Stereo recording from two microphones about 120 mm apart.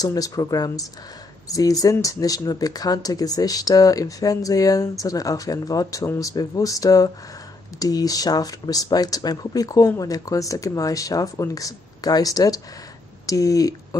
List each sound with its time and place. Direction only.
0.0 s speech: 30° left (ahead or behind)